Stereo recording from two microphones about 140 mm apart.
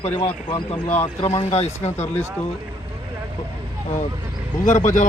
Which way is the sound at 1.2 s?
50° left (ahead or behind).